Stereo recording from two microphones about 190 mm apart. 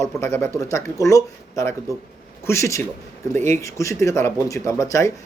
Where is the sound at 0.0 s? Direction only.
10° left (ahead or behind).